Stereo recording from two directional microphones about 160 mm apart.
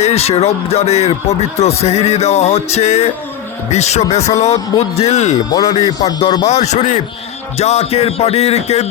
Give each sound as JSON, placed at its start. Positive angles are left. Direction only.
{"t": 0.0, "sound": "speech", "side_deg": 40}
{"t": 6.0, "sound": "music", "side_deg": 20}
{"t": 6.4, "sound": "speech", "side_deg": 45}